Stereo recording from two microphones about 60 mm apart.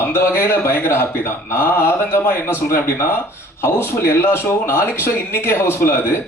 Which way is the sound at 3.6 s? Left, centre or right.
Left.